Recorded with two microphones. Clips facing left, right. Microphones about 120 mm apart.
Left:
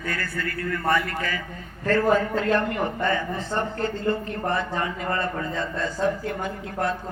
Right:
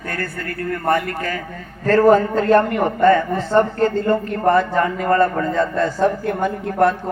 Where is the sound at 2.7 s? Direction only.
55° right (ahead or behind).